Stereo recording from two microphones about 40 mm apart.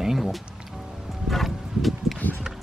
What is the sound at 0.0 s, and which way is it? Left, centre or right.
Music, centre.